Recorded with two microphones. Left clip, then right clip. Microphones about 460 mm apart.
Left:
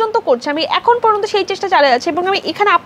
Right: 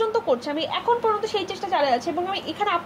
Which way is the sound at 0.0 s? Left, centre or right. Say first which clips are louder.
Left 8 dB; left.